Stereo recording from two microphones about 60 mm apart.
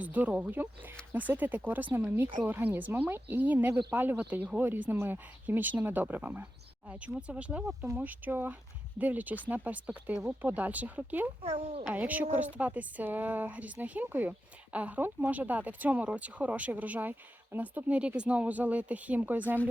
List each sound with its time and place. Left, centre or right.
0.0 s speech: right
1.9 s speech: right
2.5 s speech: right
6.8 s speech: right